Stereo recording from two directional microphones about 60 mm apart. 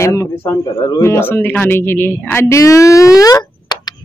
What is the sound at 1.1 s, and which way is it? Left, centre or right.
Speech, left.